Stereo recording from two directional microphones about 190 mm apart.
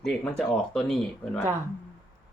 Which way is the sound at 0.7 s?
5° left (ahead or behind).